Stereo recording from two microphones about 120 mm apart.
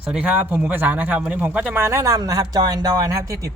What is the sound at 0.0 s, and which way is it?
Speech, 10° right (ahead or behind).